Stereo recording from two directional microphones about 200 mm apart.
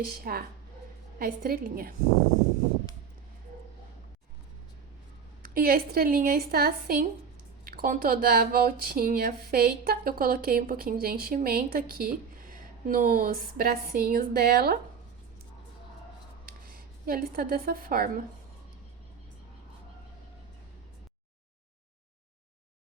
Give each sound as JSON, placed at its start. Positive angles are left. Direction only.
{"t": 0.0, "sound": "speech", "side_deg": -50}
{"t": 5.4, "sound": "speech", "side_deg": -45}
{"t": 16.5, "sound": "speech", "side_deg": -45}